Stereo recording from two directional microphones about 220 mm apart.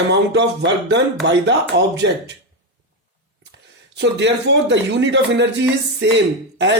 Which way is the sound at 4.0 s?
55° right (ahead or behind).